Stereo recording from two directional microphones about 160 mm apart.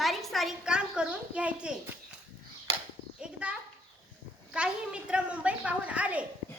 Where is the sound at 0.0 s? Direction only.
Centre (ahead or behind).